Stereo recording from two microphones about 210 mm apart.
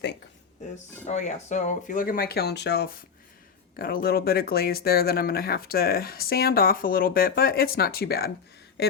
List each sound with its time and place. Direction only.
1.0 s speech: 35° left (ahead or behind)